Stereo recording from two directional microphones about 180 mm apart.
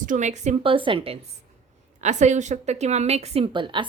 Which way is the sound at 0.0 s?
45° right (ahead or behind).